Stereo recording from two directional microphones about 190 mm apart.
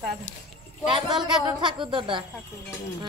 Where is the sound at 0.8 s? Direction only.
25° right (ahead or behind).